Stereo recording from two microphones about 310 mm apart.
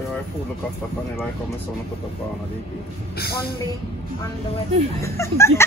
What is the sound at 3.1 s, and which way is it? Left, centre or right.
Speech, left.